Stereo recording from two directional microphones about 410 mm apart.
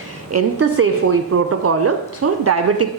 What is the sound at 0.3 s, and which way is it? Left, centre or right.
A woman's voice, right.